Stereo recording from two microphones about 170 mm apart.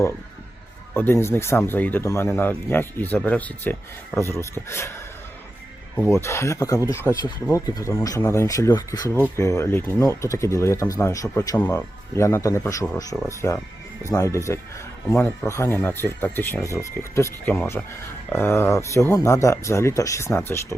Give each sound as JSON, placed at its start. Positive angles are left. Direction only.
{"t": 0.9, "sound": "speech", "side_deg": 15}